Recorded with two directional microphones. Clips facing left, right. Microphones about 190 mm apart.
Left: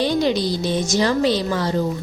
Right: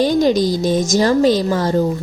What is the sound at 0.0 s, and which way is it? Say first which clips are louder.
A woman's voice: right 5 dB; 45° right (ahead or behind).